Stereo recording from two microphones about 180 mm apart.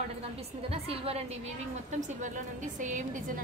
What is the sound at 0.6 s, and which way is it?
A woman's voice, 35° right (ahead or behind).